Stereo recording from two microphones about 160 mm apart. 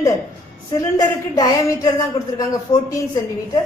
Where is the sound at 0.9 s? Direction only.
20° left (ahead or behind).